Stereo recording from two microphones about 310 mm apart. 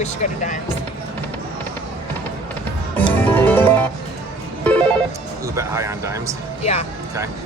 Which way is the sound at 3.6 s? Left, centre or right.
Centre.